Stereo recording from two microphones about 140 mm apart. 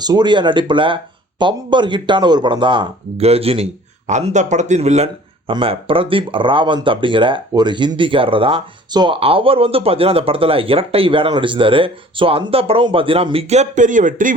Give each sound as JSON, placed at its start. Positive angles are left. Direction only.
{"t": 0.0, "sound": "speech", "side_deg": -30}
{"t": 5.5, "sound": "speech", "side_deg": -40}